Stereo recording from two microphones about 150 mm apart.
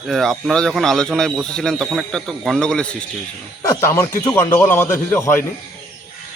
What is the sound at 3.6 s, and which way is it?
Speech, 15° left (ahead or behind).